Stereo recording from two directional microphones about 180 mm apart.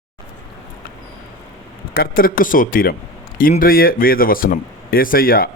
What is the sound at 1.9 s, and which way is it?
Speech, 55° left (ahead or behind).